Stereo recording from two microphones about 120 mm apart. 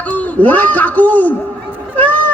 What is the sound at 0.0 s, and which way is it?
Speech, 10° left (ahead or behind).